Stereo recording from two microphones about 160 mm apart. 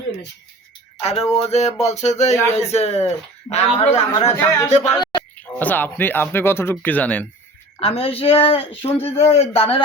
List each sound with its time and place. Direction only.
1.0 s a sound: 40° left (ahead or behind)
2.6 s a woman's voice: 40° left (ahead or behind)
3.9 s a sound: 45° left (ahead or behind)
4.4 s speech: 15° left (ahead or behind)
5.4 s speech: 10° left (ahead or behind)
7.8 s a woman's voice: 35° left (ahead or behind)
8.9 s speech: 15° left (ahead or behind)
9.3 s a woman's voice: 40° left (ahead or behind)